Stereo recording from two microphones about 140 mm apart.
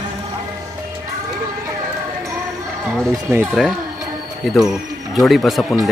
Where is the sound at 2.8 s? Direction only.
Centre (ahead or behind).